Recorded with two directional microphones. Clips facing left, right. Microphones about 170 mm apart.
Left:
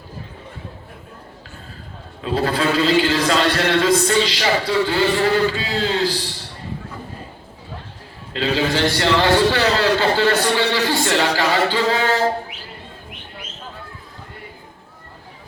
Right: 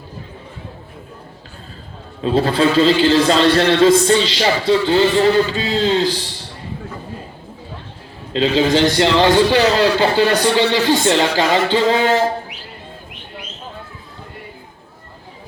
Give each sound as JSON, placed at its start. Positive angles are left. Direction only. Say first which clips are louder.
{"t": 2.2, "sound": "a man's voice", "louder": "right 5 dB", "side_deg": -25}
{"t": 8.3, "sound": "a man's voice", "louder": "right 5 dB", "side_deg": -20}